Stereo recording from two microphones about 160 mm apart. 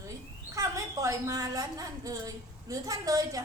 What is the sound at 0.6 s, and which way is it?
A woman's voice, 20° right (ahead or behind).